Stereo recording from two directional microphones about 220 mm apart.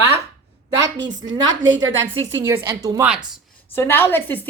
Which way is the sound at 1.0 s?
55° right (ahead or behind).